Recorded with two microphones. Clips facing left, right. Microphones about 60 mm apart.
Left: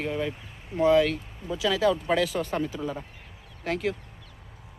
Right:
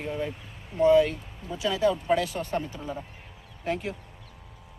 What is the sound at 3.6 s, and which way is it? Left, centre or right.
Speech, left.